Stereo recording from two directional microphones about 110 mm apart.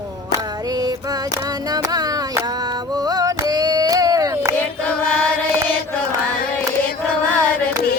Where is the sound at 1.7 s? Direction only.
35° right (ahead or behind).